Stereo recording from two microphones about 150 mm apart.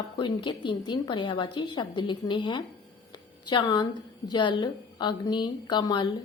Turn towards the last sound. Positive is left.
turn(degrees=30)  # may be behind; listen again after turning